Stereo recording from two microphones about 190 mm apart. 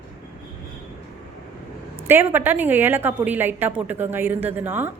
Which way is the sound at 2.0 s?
10° right (ahead or behind).